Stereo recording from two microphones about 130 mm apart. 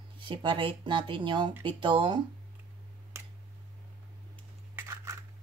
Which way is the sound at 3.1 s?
20° right (ahead or behind).